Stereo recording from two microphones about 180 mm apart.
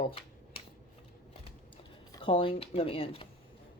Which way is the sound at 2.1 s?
30° left (ahead or behind).